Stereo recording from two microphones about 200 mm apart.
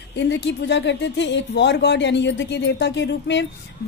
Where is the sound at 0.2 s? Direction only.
60° left (ahead or behind).